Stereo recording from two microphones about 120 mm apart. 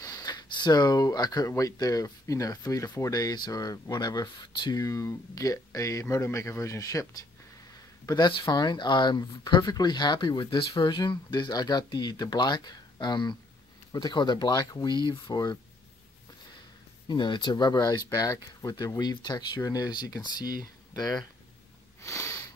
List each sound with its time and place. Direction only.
0.0 s speech: 30° left (ahead or behind)
8.1 s speech: 40° left (ahead or behind)
17.1 s speech: 40° left (ahead or behind)
22.0 s sniff: 25° left (ahead or behind)